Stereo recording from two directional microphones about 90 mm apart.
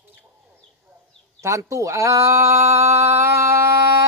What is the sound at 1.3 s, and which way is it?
Speech, 35° right (ahead or behind).